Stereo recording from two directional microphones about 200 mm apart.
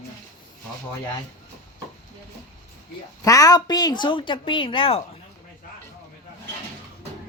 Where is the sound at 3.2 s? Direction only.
15° left (ahead or behind).